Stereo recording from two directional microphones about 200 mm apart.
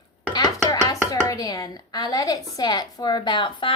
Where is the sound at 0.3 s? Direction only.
20° left (ahead or behind).